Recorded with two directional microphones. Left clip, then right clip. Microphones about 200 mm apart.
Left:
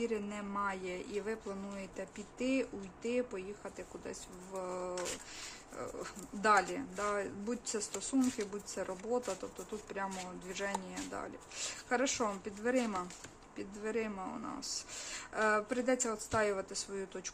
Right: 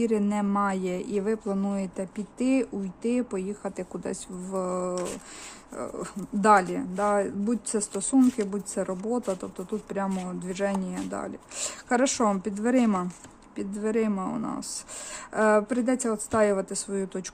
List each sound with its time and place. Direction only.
0.0 s speech: 50° right (ahead or behind)